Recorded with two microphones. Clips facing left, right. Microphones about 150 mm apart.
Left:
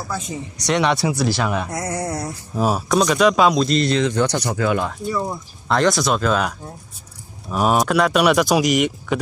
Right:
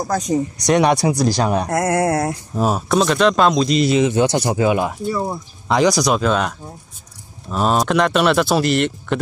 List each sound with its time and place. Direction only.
0.0 s speech: 40° right (ahead or behind)
1.7 s a sound: 75° right (ahead or behind); by 2.3 s 90° right
2.5 s speech: centre (ahead or behind)
4.0 s speech: 15° right (ahead or behind)
5.7 s speech: centre (ahead or behind)